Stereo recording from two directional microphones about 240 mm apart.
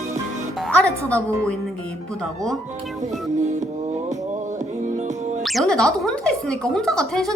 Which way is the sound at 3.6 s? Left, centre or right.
Right.